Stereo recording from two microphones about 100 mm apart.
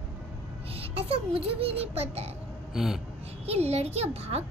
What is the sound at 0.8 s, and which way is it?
Speech, 75° right (ahead or behind).